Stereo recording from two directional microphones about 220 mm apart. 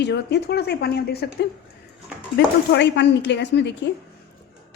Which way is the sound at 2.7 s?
50° left (ahead or behind).